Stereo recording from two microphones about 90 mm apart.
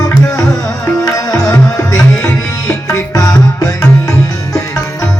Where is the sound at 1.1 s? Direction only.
40° left (ahead or behind).